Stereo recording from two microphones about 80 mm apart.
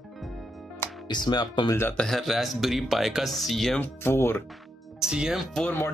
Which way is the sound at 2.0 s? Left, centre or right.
Centre.